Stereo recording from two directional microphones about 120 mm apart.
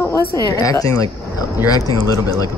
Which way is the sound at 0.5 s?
30° left (ahead or behind).